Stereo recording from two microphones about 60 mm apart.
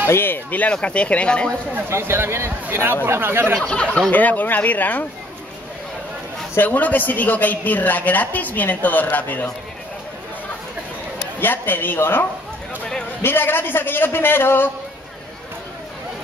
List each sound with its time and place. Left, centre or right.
0.1 s speech: left; by 1.5 s centre
1.9 s speech: right
3.5 s speech: centre
4.1 s speech: left
6.6 s speech: left
11.3 s a man's voice: left